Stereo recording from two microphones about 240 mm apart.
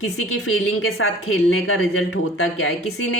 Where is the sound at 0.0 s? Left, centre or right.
Left.